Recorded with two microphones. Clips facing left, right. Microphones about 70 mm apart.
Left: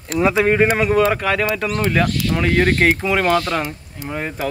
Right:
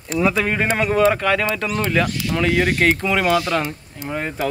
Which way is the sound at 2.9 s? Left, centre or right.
Centre.